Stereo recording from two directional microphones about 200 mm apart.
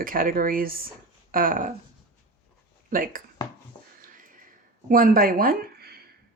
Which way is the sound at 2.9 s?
45° right (ahead or behind).